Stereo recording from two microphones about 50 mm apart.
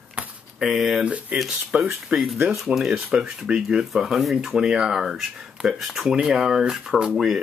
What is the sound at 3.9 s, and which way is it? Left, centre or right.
Speech, centre.